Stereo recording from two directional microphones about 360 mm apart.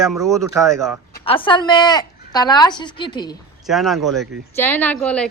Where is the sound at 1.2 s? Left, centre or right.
Centre.